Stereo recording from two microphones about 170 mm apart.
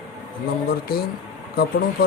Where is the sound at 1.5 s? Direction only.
60° left (ahead or behind).